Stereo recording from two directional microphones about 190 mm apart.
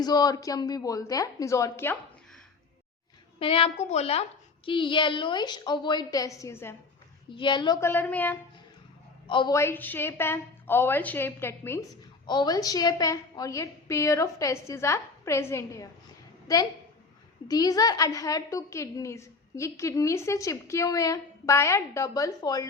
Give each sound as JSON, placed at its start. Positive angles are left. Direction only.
{"t": 0.0, "sound": "a woman's voice", "side_deg": 20}
{"t": 3.3, "sound": "a woman's voice", "side_deg": 30}
{"t": 7.3, "sound": "a woman's voice", "side_deg": 25}
{"t": 7.8, "sound": "a woman's voice", "side_deg": 10}
{"t": 9.2, "sound": "a woman's voice", "side_deg": 25}
{"t": 9.6, "sound": "a woman's voice", "side_deg": 10}
{"t": 12.2, "sound": "a woman's voice", "side_deg": 25}